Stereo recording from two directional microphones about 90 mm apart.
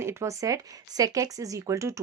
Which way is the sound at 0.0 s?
30° right (ahead or behind).